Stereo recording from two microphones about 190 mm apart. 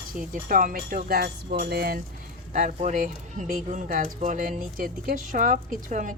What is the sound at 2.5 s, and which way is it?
Speech, 40° right (ahead or behind).